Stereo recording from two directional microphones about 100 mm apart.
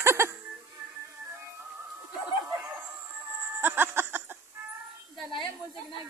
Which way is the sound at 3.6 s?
20° right (ahead or behind).